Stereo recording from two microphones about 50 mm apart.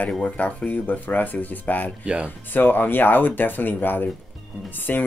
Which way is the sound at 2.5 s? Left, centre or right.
Left.